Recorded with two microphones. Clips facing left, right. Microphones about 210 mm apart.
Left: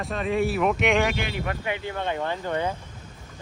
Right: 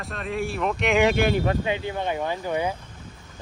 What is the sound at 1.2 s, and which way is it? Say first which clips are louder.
Speech: right 9 dB; 45° right (ahead or behind).